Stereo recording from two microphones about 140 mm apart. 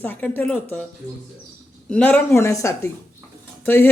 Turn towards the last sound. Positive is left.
turn(degrees=15)  # may be behind; listen again after turning